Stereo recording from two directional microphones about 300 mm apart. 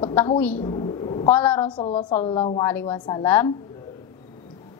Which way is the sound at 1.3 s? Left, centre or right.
Centre.